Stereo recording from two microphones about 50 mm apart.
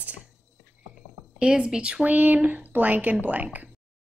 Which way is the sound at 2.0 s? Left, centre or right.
Right.